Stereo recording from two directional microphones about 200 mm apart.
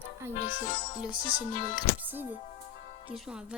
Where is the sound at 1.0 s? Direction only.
25° right (ahead or behind).